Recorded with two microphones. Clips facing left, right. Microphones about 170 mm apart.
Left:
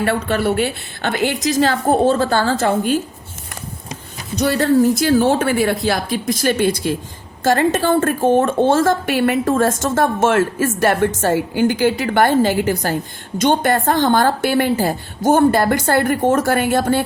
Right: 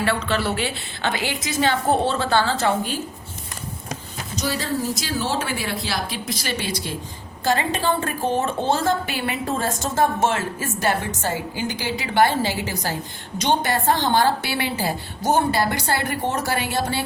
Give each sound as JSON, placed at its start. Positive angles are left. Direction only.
{"t": 0.0, "sound": "a woman's voice", "side_deg": 55}
{"t": 4.4, "sound": "a woman's voice", "side_deg": 60}